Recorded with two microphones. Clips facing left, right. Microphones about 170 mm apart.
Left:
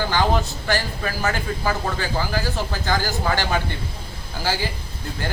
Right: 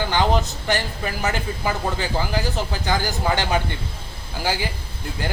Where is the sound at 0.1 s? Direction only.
20° right (ahead or behind).